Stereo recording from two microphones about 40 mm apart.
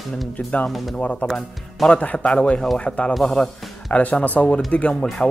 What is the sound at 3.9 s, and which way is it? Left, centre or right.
Speech, left.